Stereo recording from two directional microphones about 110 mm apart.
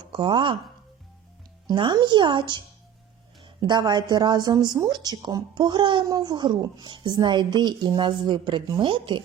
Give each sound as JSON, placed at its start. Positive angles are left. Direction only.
{"t": 0.1, "sound": "speech", "side_deg": -50}
{"t": 1.6, "sound": "a woman's voice", "side_deg": -45}